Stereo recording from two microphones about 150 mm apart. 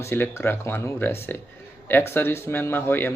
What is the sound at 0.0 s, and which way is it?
Speech, 15° left (ahead or behind).